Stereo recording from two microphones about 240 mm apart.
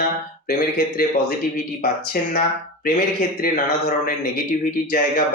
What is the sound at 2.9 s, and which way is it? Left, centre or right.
Speech, left.